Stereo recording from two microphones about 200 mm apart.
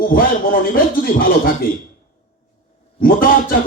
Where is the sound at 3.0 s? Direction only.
45° left (ahead or behind).